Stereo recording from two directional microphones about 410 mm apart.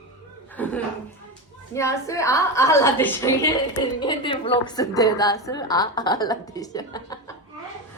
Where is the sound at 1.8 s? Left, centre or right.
Centre.